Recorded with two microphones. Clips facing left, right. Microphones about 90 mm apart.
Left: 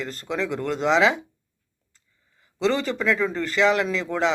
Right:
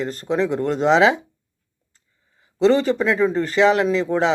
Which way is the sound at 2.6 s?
45° right (ahead or behind).